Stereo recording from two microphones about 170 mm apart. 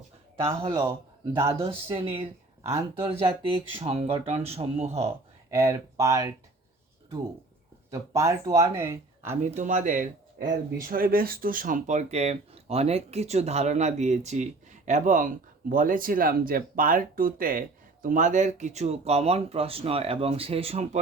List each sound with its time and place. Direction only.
0.6 s a man's voice: 25° right (ahead or behind)
1.9 s speech: 35° right (ahead or behind)
2.6 s speech: 15° right (ahead or behind)
3.5 s speech: 35° right (ahead or behind)
5.0 s speech: 15° right (ahead or behind)
7.9 s speech: 20° right (ahead or behind)
9.3 s speech: 40° right (ahead or behind)
10.8 s speech: 60° right (ahead or behind); by 21.0 s 40° right (ahead or behind)